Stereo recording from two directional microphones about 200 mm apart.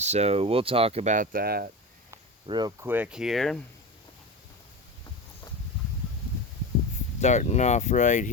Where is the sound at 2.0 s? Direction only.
20° right (ahead or behind).